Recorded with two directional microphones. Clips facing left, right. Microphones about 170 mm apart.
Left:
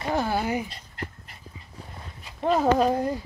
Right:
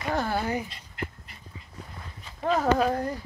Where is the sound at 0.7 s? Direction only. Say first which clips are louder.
Right 1 dB; 40° left (ahead or behind).